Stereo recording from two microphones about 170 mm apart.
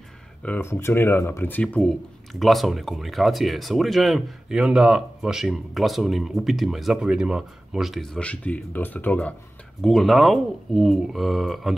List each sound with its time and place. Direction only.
0.4 s speech: 10° left (ahead or behind)